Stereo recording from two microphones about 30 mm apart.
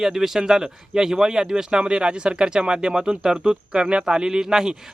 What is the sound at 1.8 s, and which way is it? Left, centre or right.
A man's voice, right.